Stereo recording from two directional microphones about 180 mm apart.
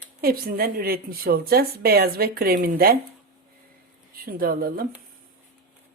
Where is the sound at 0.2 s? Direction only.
55° right (ahead or behind).